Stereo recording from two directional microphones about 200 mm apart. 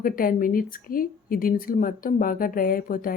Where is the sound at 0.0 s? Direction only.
45° left (ahead or behind).